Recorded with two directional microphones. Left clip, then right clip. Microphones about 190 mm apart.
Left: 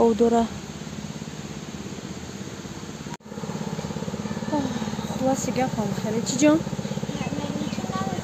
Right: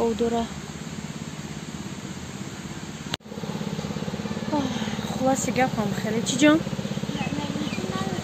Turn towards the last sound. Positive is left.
turn(degrees=0)  # may be behind; listen again after turning